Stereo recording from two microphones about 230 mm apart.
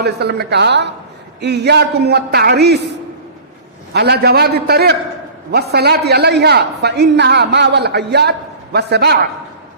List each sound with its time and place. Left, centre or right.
0.0 s a woman's voice: right
3.9 s a woman's voice: right